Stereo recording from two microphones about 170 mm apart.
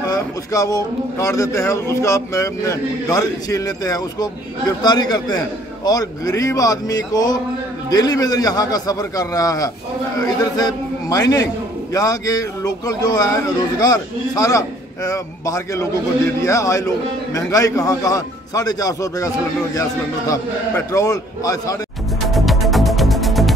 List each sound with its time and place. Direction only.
0.0 s a man's voice: 20° left (ahead or behind)
22.3 s music: centre (ahead or behind)